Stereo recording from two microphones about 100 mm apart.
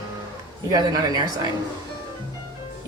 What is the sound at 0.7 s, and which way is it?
Speech, 40° right (ahead or behind).